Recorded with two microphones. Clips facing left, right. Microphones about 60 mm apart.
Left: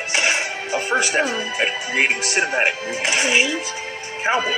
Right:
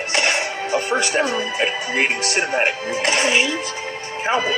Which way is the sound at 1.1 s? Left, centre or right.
Centre.